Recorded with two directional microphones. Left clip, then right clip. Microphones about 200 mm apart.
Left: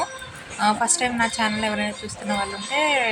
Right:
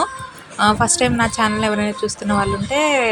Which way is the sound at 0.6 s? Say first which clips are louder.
Right 5 dB; 20° right (ahead or behind).